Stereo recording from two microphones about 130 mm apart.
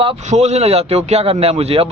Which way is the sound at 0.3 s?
55° right (ahead or behind).